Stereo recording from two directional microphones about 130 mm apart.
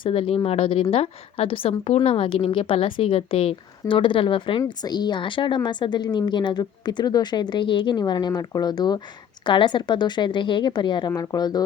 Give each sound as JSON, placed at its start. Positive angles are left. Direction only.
{"t": 0.0, "sound": "a woman's voice", "side_deg": 45}